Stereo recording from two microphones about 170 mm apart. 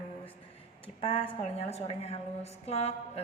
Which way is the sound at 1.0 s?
30° left (ahead or behind).